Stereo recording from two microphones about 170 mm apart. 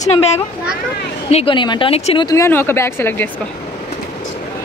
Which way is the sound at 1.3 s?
30° left (ahead or behind).